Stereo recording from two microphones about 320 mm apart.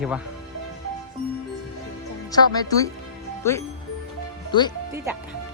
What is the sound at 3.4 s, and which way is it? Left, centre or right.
Speech, centre.